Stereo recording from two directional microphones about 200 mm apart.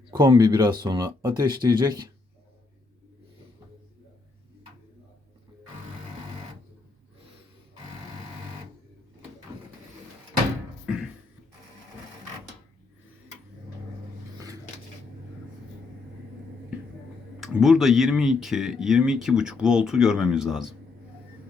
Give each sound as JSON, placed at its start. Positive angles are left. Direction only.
{"t": 0.1, "sound": "speech", "side_deg": -20}
{"t": 14.3, "sound": "a sound", "side_deg": -15}
{"t": 17.4, "sound": "speech", "side_deg": 0}